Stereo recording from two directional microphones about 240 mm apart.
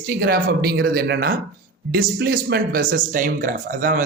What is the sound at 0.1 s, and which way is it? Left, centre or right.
Speech, right.